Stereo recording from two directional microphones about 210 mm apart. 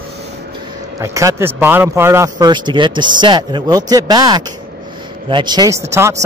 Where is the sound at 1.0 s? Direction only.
15° right (ahead or behind).